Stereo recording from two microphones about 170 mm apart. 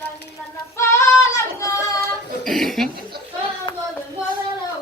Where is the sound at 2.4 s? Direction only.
Centre (ahead or behind).